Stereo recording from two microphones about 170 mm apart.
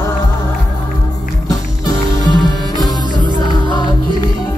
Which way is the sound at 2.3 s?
25° left (ahead or behind).